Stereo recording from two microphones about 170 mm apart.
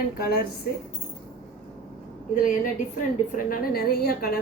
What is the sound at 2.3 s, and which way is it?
A woman's voice, 50° left (ahead or behind).